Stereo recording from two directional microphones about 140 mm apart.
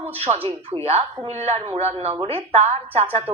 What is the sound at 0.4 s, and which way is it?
Speech, 45° right (ahead or behind).